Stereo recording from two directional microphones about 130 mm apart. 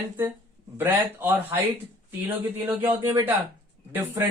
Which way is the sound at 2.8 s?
20° right (ahead or behind).